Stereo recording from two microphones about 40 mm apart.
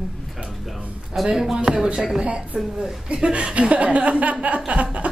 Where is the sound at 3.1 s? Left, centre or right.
Right.